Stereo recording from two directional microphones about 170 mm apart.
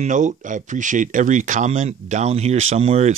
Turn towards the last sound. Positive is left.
turn(degrees=-40)  # may be behind; listen again after turning